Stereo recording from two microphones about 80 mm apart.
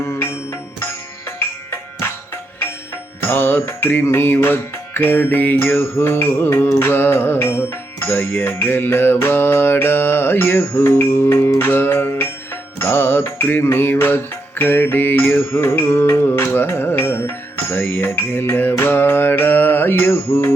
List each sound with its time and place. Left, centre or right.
0.0 s music: left